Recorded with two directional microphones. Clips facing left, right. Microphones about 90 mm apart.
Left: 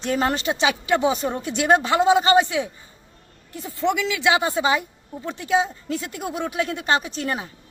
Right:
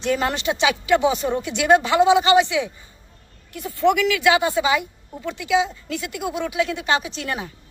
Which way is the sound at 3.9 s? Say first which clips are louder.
Right 3 dB; 25° left (ahead or behind).